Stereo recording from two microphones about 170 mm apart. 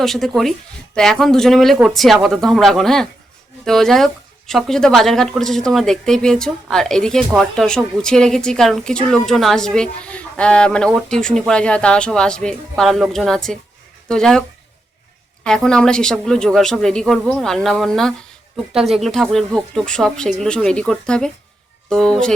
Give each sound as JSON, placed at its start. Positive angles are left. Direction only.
{"t": 0.0, "sound": "speech", "side_deg": 0}
{"t": 15.4, "sound": "speech", "side_deg": 5}